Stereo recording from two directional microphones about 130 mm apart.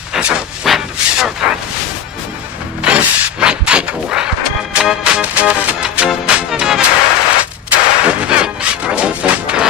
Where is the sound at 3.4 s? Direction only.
5° right (ahead or behind).